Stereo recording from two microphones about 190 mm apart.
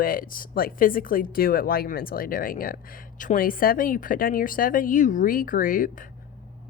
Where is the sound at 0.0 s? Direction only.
50° left (ahead or behind).